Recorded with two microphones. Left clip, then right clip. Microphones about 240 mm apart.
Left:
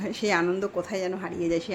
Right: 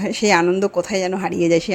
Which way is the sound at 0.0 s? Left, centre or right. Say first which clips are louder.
Right 9 dB; right.